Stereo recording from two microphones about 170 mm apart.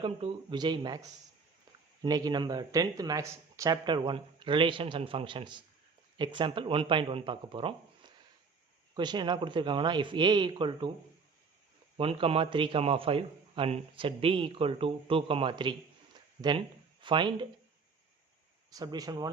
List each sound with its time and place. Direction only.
0.0 s speech: 25° right (ahead or behind)
11.9 s a man's voice: 35° right (ahead or behind)
18.7 s speech: 20° right (ahead or behind)